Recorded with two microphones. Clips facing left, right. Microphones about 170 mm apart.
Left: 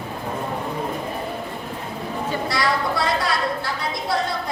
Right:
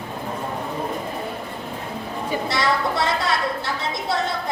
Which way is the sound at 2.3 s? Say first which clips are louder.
Right 1 dB; 25° right (ahead or behind).